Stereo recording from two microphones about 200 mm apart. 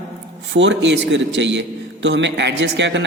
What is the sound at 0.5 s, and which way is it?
A man's voice, 65° right (ahead or behind).